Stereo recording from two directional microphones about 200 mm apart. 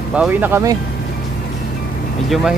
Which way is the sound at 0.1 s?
5° right (ahead or behind).